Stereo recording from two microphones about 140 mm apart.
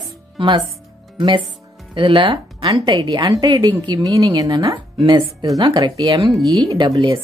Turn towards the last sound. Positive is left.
turn(degrees=-30)  # may be behind; listen again after turning